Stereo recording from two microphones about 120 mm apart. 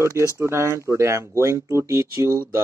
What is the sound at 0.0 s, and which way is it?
Speech, 25° right (ahead or behind).